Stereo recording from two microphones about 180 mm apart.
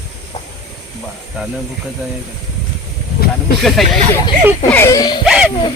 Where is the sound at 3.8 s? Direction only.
Centre (ahead or behind).